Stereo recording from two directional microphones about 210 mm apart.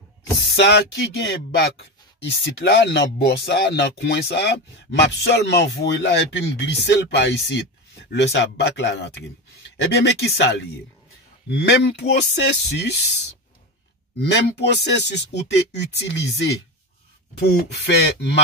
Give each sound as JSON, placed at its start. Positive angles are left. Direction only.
{"t": 0.6, "sound": "speech", "side_deg": 55}
{"t": 11.5, "sound": "speech", "side_deg": 55}
{"t": 14.1, "sound": "speech", "side_deg": 55}